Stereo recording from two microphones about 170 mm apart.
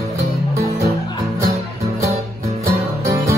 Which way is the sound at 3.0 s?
15° right (ahead or behind).